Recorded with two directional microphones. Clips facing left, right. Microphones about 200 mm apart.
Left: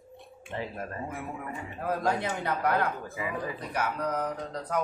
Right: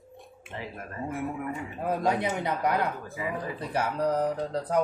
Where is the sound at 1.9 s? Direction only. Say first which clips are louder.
Right 2 dB; 20° right (ahead or behind).